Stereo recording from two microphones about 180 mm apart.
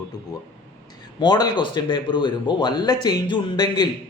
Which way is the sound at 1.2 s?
25° left (ahead or behind).